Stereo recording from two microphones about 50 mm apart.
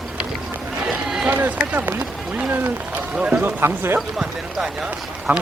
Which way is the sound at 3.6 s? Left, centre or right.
Right.